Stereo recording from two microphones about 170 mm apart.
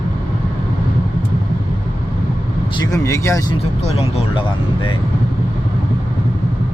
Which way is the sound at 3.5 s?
35° left (ahead or behind).